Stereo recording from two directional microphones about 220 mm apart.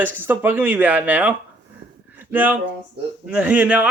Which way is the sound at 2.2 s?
10° right (ahead or behind).